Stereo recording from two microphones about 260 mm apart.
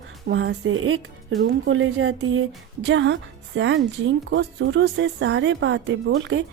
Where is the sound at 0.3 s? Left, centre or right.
Right.